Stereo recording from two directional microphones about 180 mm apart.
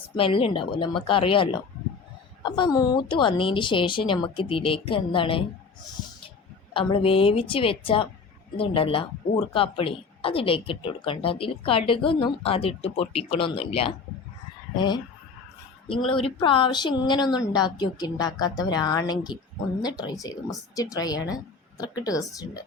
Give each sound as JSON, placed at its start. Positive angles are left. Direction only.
{"t": 0.2, "sound": "speech", "side_deg": 30}
{"t": 6.7, "sound": "speech", "side_deg": 30}
{"t": 16.0, "sound": "speech", "side_deg": 30}